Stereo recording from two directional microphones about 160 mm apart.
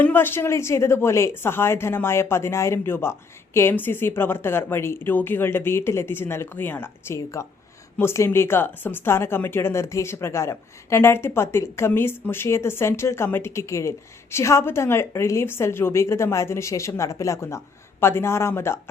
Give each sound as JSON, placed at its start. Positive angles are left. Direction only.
{"t": 0.0, "sound": "speech", "side_deg": 15}